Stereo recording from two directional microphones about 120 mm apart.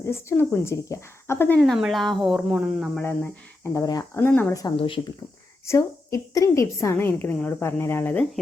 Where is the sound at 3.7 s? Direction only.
30° left (ahead or behind).